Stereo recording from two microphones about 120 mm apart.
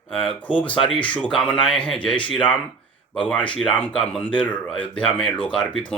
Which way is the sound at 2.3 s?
10° left (ahead or behind).